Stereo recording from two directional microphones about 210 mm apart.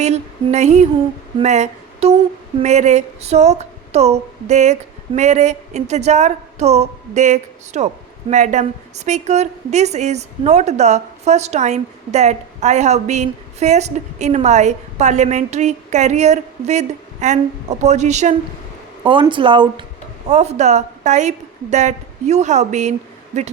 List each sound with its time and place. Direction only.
0.0 s a woman's voice: 30° right (ahead or behind)
19.0 s a woman's voice: 25° right (ahead or behind)